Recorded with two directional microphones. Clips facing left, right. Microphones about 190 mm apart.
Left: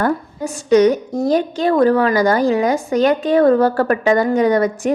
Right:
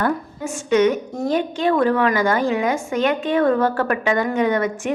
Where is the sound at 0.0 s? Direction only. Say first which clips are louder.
Left 3 dB; 35° left (ahead or behind).